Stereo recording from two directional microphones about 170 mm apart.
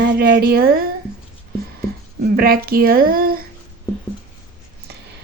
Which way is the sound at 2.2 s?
60° right (ahead or behind).